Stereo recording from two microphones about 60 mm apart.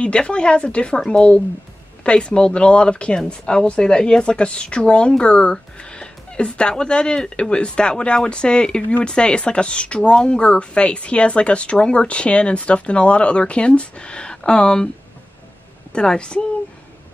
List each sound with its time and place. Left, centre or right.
0.0 s speech: centre
15.9 s speech: centre